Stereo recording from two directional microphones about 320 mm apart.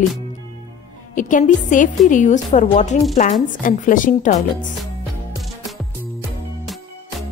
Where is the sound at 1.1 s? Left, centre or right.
Left.